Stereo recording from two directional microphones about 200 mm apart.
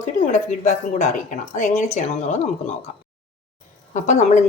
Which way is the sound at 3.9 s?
35° left (ahead or behind).